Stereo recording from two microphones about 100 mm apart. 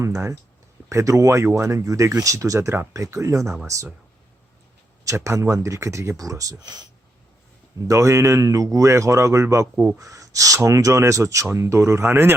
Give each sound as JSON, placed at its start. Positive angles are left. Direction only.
{"t": 0.0, "sound": "speech", "side_deg": -30}
{"t": 5.0, "sound": "speech", "side_deg": -30}
{"t": 7.9, "sound": "speech", "side_deg": -30}